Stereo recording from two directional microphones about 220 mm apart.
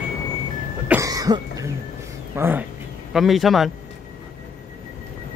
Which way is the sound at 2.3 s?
10° right (ahead or behind).